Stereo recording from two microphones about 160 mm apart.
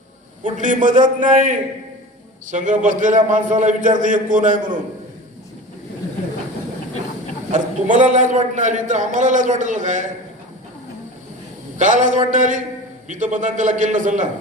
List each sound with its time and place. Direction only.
0.4 s a man's voice: 55° right (ahead or behind)
7.5 s a man's voice: 50° right (ahead or behind)
11.8 s a man's voice: 50° right (ahead or behind)